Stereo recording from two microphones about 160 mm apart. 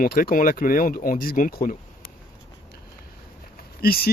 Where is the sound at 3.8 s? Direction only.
70° left (ahead or behind).